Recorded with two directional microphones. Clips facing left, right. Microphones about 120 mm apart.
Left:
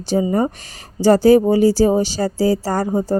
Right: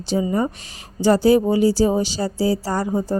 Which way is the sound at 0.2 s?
40° left (ahead or behind).